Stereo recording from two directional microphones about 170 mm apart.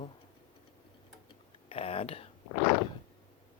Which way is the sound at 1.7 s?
35° left (ahead or behind).